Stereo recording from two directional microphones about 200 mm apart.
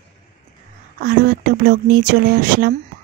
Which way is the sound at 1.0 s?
45° right (ahead or behind).